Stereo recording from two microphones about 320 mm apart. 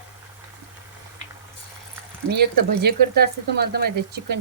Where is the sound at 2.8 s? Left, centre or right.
Right.